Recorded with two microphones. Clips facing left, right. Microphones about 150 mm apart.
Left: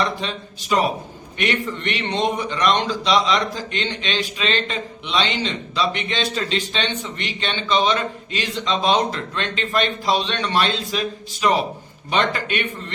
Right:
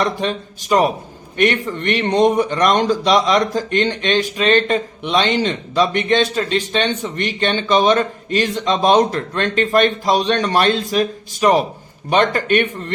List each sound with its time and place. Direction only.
0.0 s speech: 45° right (ahead or behind)